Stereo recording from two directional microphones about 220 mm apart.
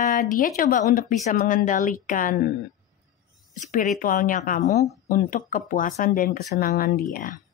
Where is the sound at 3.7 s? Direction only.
40° left (ahead or behind).